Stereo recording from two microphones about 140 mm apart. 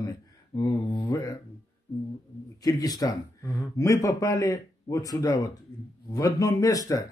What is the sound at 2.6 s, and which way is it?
Speech, 25° left (ahead or behind).